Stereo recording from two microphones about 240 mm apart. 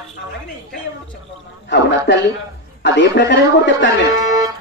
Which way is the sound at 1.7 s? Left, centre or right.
Left.